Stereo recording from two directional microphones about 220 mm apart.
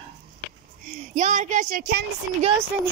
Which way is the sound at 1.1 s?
35° right (ahead or behind).